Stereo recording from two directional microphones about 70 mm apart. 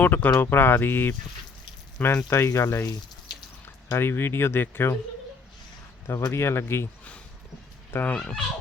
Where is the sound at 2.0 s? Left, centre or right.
Left.